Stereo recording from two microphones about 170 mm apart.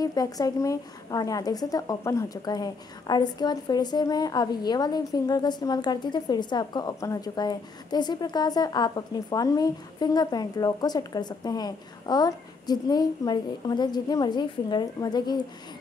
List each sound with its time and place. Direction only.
0.0 s a woman's voice: 20° left (ahead or behind)